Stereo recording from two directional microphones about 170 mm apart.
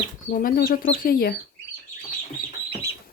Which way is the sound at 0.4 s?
55° left (ahead or behind).